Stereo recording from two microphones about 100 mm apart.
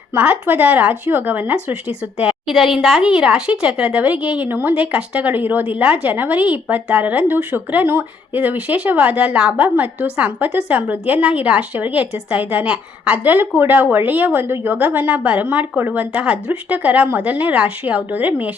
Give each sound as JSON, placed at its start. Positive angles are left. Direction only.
{"t": 0.1, "sound": "speech", "side_deg": -20}
{"t": 2.1, "sound": "a woman's voice", "side_deg": -5}